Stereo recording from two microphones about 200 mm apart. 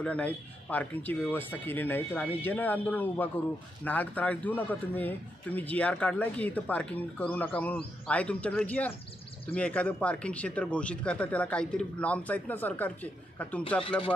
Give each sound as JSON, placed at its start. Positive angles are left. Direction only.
{"t": 0.0, "sound": "a man's voice", "side_deg": 5}
{"t": 13.8, "sound": "speech", "side_deg": 25}